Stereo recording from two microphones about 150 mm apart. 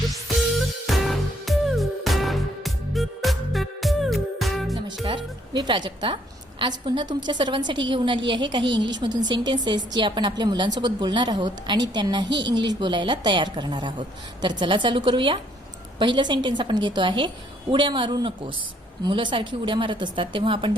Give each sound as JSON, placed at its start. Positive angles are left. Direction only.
{"t": 0.9, "sound": "music", "side_deg": 0}
{"t": 5.0, "sound": "music", "side_deg": -30}
{"t": 6.6, "sound": "a woman's voice", "side_deg": -35}